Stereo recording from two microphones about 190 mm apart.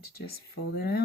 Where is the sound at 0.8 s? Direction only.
55° left (ahead or behind).